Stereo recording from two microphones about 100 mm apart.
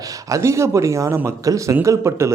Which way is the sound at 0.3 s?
30° right (ahead or behind).